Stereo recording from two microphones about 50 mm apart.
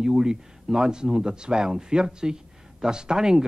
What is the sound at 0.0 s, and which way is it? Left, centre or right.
Speech, centre.